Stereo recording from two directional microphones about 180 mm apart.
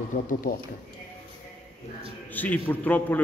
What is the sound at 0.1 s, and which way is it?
Speech, 50° left (ahead or behind).